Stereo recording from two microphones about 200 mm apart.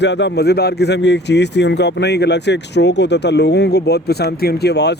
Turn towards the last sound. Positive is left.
turn(degrees=55)  # may be behind; listen again after turning